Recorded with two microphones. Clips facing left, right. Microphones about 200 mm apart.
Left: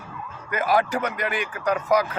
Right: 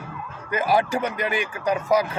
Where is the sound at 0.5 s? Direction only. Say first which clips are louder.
Right 1 dB; 30° right (ahead or behind).